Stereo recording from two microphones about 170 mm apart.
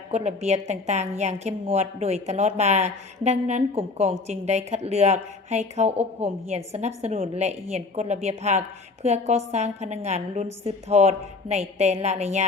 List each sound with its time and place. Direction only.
0.1 s a woman's voice: 40° right (ahead or behind)